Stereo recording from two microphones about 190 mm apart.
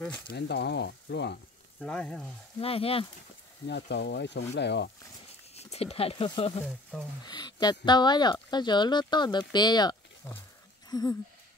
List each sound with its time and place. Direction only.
0.3 s speech: 60° left (ahead or behind)
1.8 s speech: 5° left (ahead or behind)
2.6 s speech: 30° left (ahead or behind)
3.6 s speech: 65° left (ahead or behind)
5.6 s speech: 35° left (ahead or behind)
6.6 s speech: 5° right (ahead or behind)
7.2 s speech: 20° left (ahead or behind)